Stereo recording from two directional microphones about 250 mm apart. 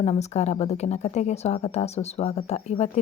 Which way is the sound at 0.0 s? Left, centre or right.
Left.